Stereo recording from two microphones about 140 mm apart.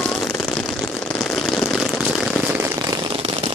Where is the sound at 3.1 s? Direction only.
40° right (ahead or behind).